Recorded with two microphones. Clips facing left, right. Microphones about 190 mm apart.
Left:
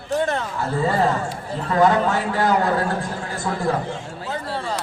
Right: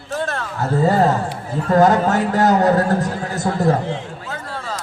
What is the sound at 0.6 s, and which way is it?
A man's voice, 40° right (ahead or behind).